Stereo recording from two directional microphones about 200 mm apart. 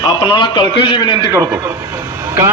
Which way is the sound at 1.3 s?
15° right (ahead or behind).